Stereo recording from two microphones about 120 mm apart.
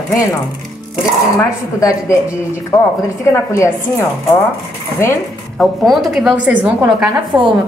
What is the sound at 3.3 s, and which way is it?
Speech, 25° left (ahead or behind).